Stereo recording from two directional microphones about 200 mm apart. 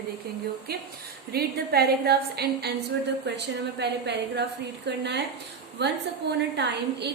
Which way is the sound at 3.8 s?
60° right (ahead or behind).